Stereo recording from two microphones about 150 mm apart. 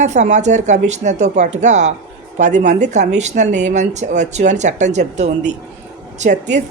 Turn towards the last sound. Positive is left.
turn(degrees=-55)  # may be behind; listen again after turning